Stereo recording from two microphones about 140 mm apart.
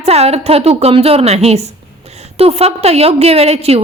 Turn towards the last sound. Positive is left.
turn(degrees=-45)  # may be behind; listen again after turning